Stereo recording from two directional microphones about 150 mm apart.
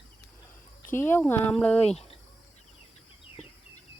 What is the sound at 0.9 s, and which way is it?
Speech, 15° left (ahead or behind).